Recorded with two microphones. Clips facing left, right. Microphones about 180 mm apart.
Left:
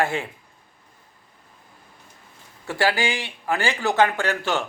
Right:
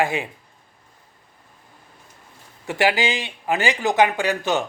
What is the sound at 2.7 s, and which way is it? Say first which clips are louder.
Speech: right 2 dB; 15° right (ahead or behind).